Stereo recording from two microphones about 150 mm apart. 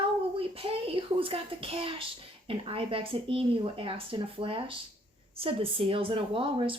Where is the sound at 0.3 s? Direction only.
40° right (ahead or behind).